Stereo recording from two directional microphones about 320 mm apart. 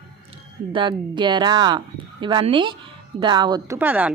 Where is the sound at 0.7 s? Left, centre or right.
Centre.